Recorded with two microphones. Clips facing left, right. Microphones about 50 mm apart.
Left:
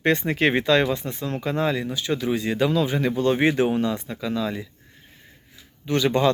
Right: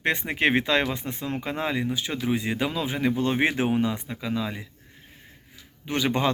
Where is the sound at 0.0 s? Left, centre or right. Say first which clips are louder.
Left 3 dB; centre.